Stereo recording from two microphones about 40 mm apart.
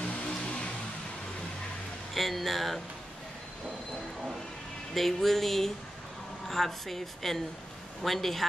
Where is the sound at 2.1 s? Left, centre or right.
Centre.